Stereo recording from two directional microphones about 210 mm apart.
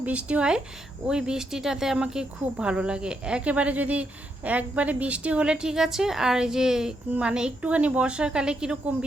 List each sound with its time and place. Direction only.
0.0 s a woman's voice: 5° right (ahead or behind)